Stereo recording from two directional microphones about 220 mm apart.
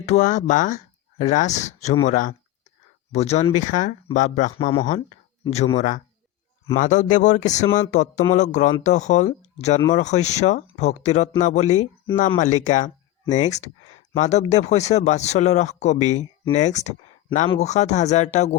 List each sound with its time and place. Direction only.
0.0 s speech: 30° left (ahead or behind)